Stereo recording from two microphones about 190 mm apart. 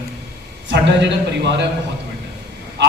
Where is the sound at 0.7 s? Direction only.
65° right (ahead or behind).